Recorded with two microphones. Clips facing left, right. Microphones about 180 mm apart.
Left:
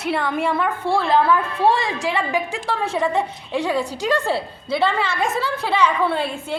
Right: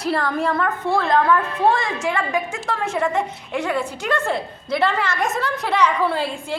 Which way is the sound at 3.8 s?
35° left (ahead or behind).